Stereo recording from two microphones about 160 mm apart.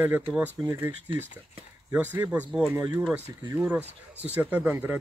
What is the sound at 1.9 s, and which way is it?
Speech, 10° right (ahead or behind).